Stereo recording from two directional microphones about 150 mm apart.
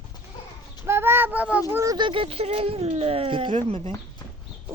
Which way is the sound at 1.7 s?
20° right (ahead or behind).